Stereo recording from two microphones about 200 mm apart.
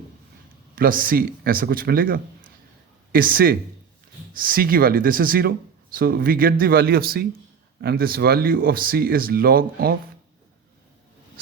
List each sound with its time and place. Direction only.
0.8 s speech: 45° right (ahead or behind)